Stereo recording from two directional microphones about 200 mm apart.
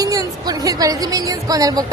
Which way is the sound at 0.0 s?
20° right (ahead or behind).